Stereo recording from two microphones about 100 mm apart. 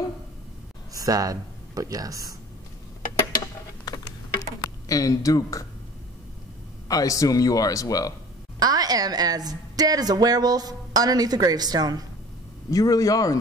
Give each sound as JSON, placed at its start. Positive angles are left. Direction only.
{"t": 0.9, "sound": "speech", "side_deg": -35}
{"t": 3.8, "sound": "computer keyboard", "side_deg": 40}
{"t": 6.9, "sound": "speech", "side_deg": 35}
{"t": 8.5, "sound": "a woman's voice", "side_deg": -40}
{"t": 12.7, "sound": "speech", "side_deg": 35}